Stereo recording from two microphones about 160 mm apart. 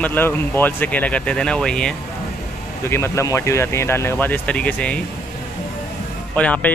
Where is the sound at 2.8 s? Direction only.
15° left (ahead or behind).